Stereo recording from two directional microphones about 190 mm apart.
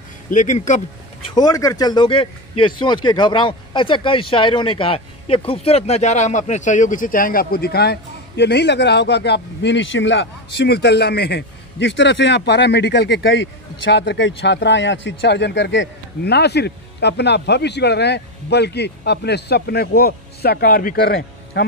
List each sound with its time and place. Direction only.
0.3 s speech: 40° left (ahead or behind)
1.3 s speech: 20° left (ahead or behind); by 21.6 s 55° left (ahead or behind)